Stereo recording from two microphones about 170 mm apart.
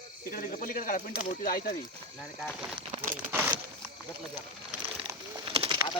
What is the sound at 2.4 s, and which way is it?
Speech, centre (ahead or behind).